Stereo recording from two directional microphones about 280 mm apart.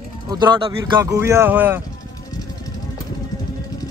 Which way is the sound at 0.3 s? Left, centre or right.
Centre.